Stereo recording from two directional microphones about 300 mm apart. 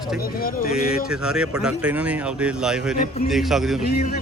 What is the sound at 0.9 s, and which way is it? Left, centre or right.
Speech, centre.